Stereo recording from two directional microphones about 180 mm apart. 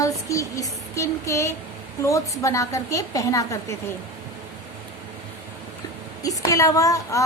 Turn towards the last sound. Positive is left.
turn(degrees=20)  # may be behind; listen again after turning